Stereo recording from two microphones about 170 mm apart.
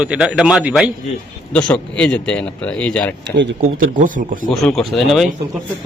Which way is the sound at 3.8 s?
50° right (ahead or behind).